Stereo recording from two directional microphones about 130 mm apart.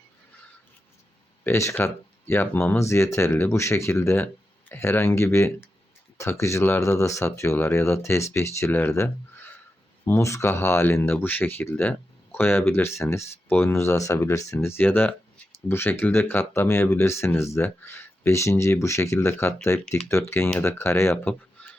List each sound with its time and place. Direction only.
1.5 s speech: 20° left (ahead or behind)